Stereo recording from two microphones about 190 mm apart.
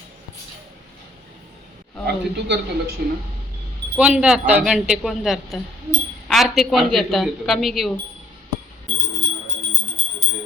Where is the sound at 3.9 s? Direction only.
5° right (ahead or behind).